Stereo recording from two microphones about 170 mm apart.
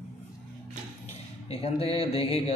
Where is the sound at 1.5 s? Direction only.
35° left (ahead or behind).